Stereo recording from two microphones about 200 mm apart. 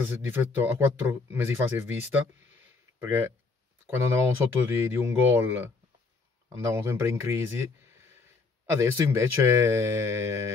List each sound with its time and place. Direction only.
0.2 s speech: 10° right (ahead or behind)